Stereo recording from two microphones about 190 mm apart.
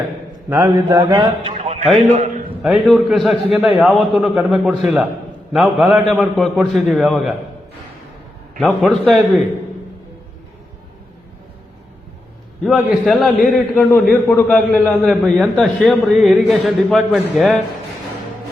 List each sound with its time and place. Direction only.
0.5 s a man's voice: 20° right (ahead or behind); by 2.4 s 40° right (ahead or behind)
2.6 s a man's voice: centre (ahead or behind)
8.5 s a man's voice: centre (ahead or behind)
12.6 s a man's voice: 5° right (ahead or behind)